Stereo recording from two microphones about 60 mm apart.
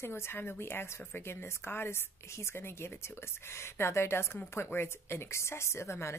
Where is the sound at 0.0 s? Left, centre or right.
Left.